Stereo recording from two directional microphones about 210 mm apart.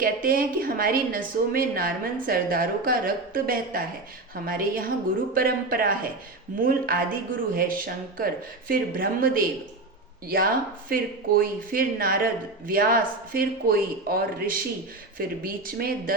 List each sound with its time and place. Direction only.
0.0 s speech: 45° right (ahead or behind)